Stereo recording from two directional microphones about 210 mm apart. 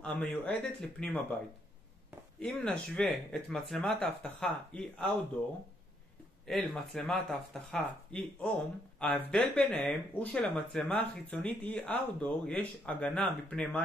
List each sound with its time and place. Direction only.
0.0 s speech: 10° left (ahead or behind)
2.4 s speech: 5° left (ahead or behind)
6.4 s speech: centre (ahead or behind)